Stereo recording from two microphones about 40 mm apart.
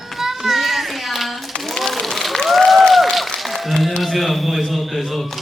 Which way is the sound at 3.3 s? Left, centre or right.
Centre.